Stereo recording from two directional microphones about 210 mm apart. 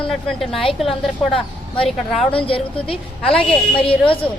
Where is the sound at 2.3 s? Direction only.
25° left (ahead or behind).